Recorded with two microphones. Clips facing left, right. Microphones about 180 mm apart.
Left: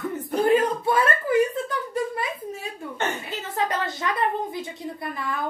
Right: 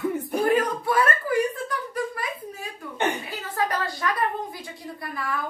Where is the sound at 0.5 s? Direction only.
25° left (ahead or behind).